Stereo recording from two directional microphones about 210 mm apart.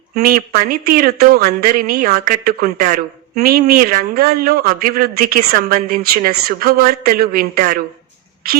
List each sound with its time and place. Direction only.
0.2 s speech: 45° right (ahead or behind)